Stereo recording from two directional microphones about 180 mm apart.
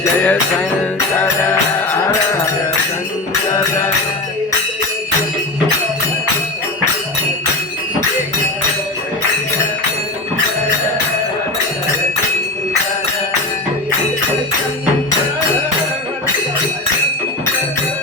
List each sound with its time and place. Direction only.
0.0 s music: 10° left (ahead or behind)
3.5 s music: 20° left (ahead or behind)